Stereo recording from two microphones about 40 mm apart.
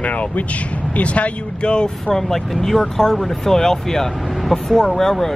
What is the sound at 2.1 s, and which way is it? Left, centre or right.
Speech, centre.